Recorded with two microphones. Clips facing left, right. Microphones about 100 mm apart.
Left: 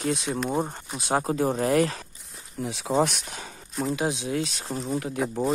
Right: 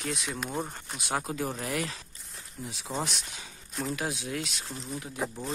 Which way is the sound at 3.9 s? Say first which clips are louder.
Left 8 dB; 25° left (ahead or behind).